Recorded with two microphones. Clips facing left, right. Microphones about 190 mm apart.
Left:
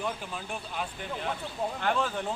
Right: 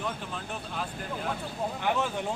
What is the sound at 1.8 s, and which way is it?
Speech, 10° right (ahead or behind).